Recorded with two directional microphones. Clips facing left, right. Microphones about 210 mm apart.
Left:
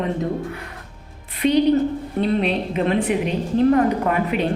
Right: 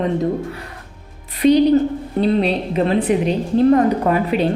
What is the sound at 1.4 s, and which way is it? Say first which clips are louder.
A woman's voice: right 4 dB; 40° right (ahead or behind).